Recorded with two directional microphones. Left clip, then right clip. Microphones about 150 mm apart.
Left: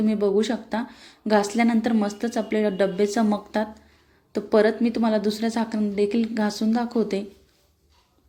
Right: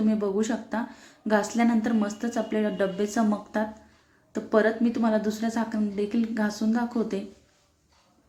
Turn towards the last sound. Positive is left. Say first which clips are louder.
# left 4 dB
turn(degrees=20)  # may be behind; listen again after turning